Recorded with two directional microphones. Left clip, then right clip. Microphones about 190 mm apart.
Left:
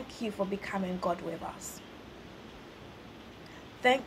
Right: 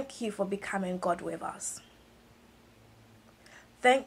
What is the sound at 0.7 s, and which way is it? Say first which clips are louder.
Speech: right 2 dB; 5° right (ahead or behind).